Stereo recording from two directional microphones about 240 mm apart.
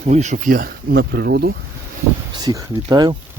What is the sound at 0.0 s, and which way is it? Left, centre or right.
Speech, right.